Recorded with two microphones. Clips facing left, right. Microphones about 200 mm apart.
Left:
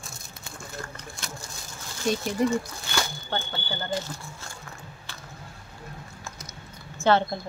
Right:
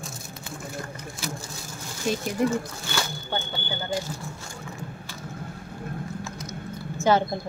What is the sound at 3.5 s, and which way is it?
Speech, 15° right (ahead or behind).